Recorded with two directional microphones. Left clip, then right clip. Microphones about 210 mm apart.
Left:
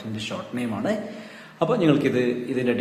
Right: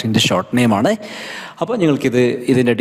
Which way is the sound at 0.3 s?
55° right (ahead or behind).